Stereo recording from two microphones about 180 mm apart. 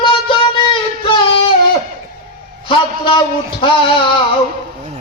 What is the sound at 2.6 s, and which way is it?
A man's voice, 25° left (ahead or behind).